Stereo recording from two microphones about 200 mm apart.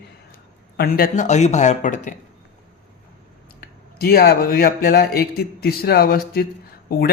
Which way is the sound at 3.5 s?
50° left (ahead or behind).